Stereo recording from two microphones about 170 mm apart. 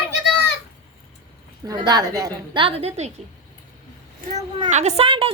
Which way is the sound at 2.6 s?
35° right (ahead or behind).